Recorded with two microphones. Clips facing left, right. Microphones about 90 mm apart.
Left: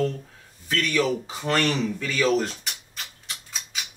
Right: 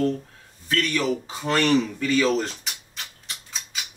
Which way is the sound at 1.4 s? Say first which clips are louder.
Right 4 dB; centre (ahead or behind).